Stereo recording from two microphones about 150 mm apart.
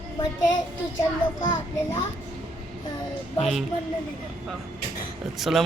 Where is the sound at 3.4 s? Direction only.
Centre (ahead or behind).